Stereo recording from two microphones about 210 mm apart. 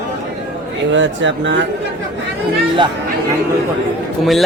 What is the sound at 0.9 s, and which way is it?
Speech, 60° right (ahead or behind).